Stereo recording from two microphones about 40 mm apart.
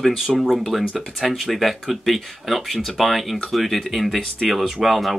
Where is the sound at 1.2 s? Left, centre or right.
Centre.